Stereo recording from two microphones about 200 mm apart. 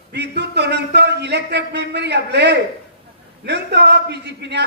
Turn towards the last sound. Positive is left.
turn(degrees=-60)  # may be behind; listen again after turning